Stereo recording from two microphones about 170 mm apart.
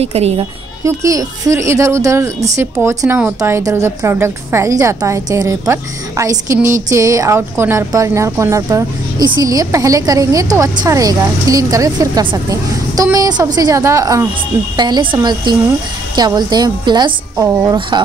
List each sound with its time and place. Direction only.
0.0 s a woman's voice: 40° right (ahead or behind)
0.8 s a woman's voice: 20° right (ahead or behind)